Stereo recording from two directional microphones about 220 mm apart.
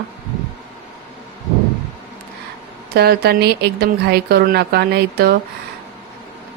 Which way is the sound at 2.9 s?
45° right (ahead or behind).